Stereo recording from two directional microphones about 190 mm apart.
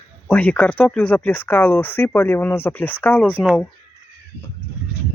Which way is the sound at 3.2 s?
5° right (ahead or behind).